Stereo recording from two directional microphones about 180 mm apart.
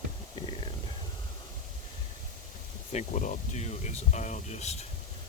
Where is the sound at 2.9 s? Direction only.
45° left (ahead or behind).